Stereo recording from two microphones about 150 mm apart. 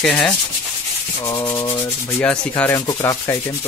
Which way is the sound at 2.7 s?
20° left (ahead or behind).